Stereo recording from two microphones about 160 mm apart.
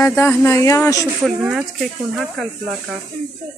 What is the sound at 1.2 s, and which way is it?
Speech, 5° right (ahead or behind).